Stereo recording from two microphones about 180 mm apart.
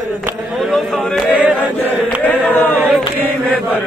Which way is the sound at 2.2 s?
10° left (ahead or behind).